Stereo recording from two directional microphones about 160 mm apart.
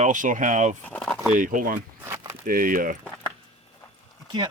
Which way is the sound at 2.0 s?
15° right (ahead or behind).